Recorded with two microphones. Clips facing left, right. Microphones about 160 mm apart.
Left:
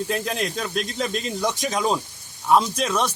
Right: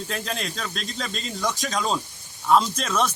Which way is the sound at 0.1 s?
15° left (ahead or behind).